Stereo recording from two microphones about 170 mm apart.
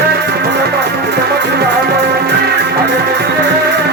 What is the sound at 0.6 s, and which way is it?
Music, 75° right (ahead or behind).